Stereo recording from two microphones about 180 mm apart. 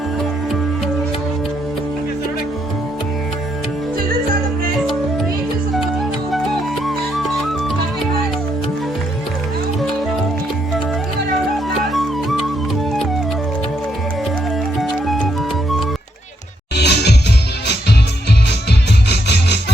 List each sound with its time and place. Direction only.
3.9 s music: 55° right (ahead or behind)
5.7 s music: centre (ahead or behind)
11.9 s music: centre (ahead or behind)
14.8 s music: centre (ahead or behind)
16.7 s music: 65° left (ahead or behind)
19.0 s music: 65° left (ahead or behind)